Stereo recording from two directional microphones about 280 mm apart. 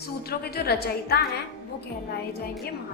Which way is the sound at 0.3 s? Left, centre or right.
Left.